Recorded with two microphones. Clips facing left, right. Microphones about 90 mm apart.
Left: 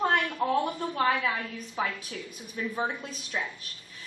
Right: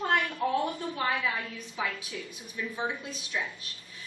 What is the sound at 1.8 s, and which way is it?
A woman's voice, 45° left (ahead or behind).